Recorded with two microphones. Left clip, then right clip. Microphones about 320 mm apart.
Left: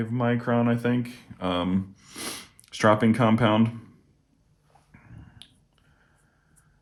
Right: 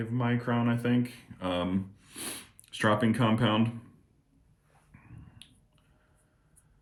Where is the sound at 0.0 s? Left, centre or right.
Left.